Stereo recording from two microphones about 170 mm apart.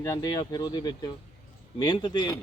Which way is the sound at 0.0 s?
20° left (ahead or behind).